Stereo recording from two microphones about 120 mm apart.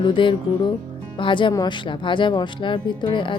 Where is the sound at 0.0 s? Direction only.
40° left (ahead or behind).